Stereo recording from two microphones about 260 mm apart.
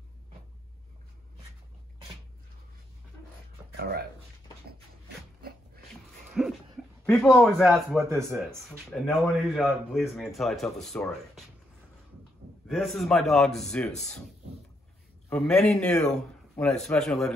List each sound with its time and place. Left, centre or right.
3.7 s a sound: right
6.4 s dog: centre
7.1 s a man's voice: centre
12.6 s a man's voice: centre
15.2 s a man's voice: centre